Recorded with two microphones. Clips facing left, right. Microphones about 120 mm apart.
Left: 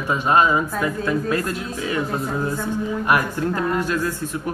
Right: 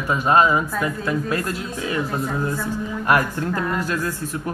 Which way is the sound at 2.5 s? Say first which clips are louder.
Left 2 dB; 15° left (ahead or behind).